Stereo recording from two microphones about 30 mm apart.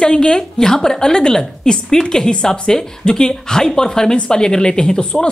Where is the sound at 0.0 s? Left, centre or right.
Left.